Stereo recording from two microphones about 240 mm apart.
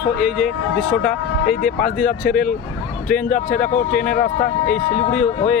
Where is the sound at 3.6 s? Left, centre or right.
Left.